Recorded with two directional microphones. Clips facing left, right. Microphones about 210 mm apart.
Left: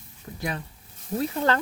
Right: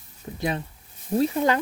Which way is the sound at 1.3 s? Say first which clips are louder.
Right 2 dB; 15° right (ahead or behind).